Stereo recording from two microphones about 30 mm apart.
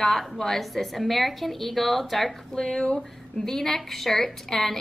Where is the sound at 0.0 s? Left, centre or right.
Centre.